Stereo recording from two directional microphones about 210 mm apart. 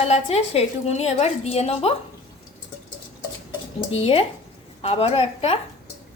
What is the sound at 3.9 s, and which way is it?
A woman's voice, 30° left (ahead or behind).